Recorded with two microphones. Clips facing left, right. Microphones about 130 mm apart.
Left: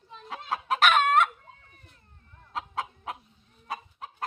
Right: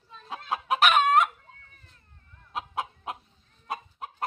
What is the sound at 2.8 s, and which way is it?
Chicken, 20° right (ahead or behind).